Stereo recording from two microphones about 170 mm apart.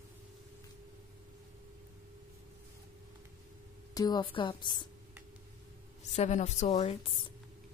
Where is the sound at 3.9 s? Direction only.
25° left (ahead or behind).